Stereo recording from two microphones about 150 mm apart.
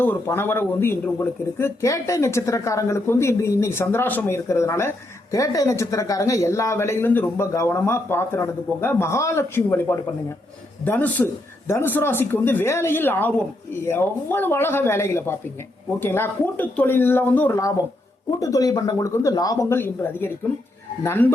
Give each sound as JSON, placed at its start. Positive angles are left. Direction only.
{"t": 0.0, "sound": "a man's voice", "side_deg": 15}